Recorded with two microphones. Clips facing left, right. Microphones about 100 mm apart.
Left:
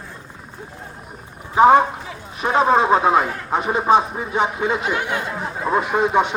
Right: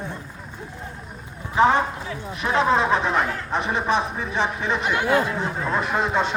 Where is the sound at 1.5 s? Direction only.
15° left (ahead or behind).